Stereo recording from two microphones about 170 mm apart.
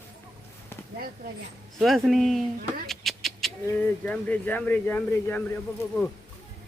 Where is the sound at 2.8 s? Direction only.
Centre (ahead or behind).